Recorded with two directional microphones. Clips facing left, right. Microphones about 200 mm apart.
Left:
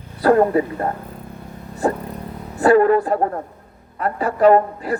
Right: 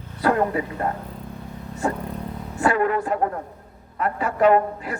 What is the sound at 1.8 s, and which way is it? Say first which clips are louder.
Vehicle: left 5 dB; 35° left (ahead or behind).